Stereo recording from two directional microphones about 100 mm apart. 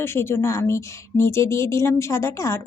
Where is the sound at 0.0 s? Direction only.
25° left (ahead or behind).